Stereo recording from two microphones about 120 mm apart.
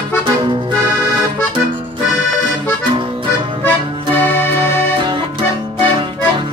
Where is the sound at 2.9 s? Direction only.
50° right (ahead or behind).